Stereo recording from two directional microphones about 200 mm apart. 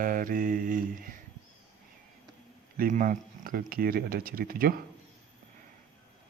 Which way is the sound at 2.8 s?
40° right (ahead or behind).